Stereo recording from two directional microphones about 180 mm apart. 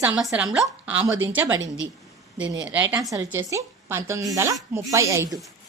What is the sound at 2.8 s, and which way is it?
A woman's voice, 15° right (ahead or behind).